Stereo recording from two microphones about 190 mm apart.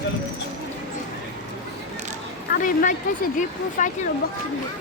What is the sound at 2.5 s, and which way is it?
Speech, 45° left (ahead or behind).